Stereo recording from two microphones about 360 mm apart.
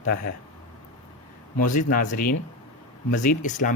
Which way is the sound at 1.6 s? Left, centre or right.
Left.